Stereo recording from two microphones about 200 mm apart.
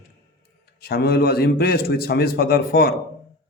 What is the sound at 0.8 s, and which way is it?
A man's voice, 55° left (ahead or behind).